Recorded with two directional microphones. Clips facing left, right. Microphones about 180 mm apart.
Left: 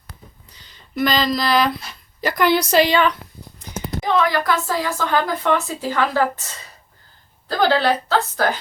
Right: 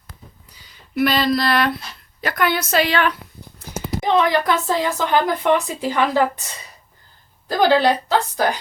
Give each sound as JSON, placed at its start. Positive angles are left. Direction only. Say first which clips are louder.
{"t": 0.5, "sound": "a woman's voice", "louder": "right 3 dB", "side_deg": -5}
{"t": 3.6, "sound": "clip-clop", "louder": "right 1 dB", "side_deg": -10}
{"t": 4.0, "sound": "a woman's voice", "louder": "right 2 dB", "side_deg": -20}
{"t": 7.4, "sound": "a woman's voice", "louder": "right 2 dB", "side_deg": -15}